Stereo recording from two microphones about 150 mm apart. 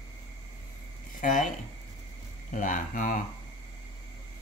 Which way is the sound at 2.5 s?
65° left (ahead or behind).